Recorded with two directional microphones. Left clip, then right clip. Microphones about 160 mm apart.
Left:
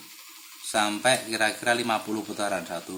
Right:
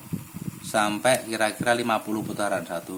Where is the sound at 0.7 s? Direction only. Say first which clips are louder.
Right 1 dB; 30° right (ahead or behind).